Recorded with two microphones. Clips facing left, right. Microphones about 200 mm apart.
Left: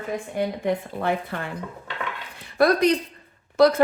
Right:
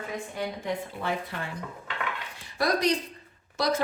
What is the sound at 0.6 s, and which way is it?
Speech, 55° left (ahead or behind).